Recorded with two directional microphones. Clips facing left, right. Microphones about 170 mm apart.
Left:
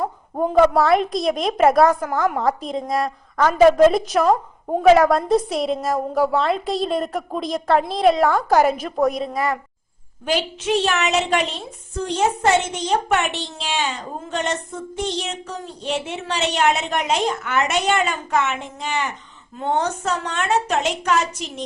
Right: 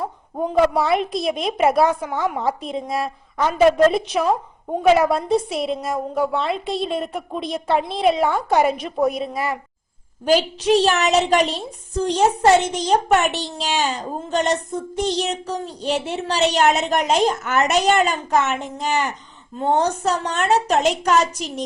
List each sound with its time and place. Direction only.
0.4 s a woman's voice: centre (ahead or behind)
10.2 s a child's voice: 35° right (ahead or behind)